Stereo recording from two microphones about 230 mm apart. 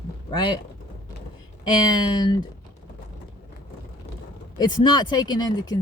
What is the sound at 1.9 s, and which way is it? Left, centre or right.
Speech, centre.